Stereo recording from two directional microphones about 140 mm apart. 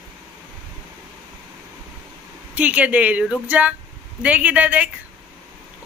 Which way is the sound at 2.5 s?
10° right (ahead or behind).